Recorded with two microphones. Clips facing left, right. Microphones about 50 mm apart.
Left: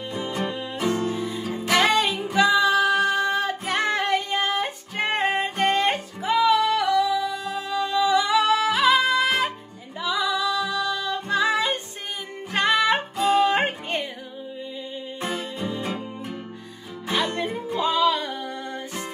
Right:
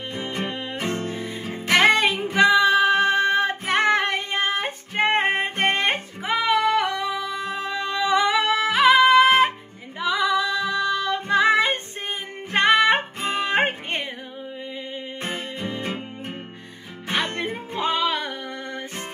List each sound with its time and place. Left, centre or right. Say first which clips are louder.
0.1 s music: left 1 dB; right
15.2 s music: left 2 dB; right